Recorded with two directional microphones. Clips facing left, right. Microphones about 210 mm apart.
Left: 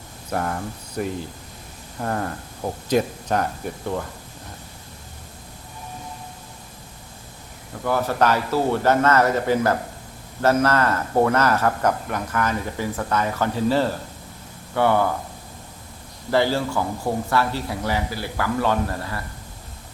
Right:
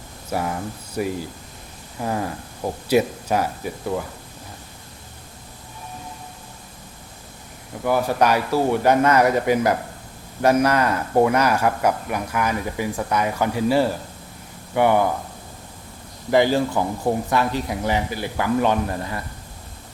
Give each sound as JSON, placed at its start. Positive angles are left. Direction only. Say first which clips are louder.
{"t": 0.3, "sound": "a man's voice", "louder": "right 1 dB", "side_deg": -5}
{"t": 7.9, "sound": "a man's voice", "louder": "right 1 dB", "side_deg": -10}
{"t": 16.3, "sound": "a man's voice", "louder": "right 3 dB", "side_deg": -15}